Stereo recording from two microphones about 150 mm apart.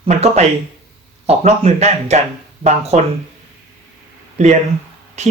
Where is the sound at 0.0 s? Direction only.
45° right (ahead or behind).